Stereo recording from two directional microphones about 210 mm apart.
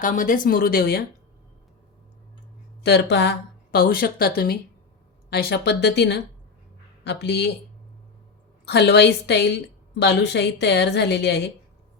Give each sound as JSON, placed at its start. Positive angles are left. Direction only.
{"t": 0.0, "sound": "speech", "side_deg": 40}
{"t": 2.8, "sound": "speech", "side_deg": 55}
{"t": 8.6, "sound": "speech", "side_deg": 50}